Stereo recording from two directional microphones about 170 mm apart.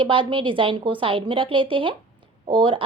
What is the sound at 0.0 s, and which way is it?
A woman's voice, 30° right (ahead or behind).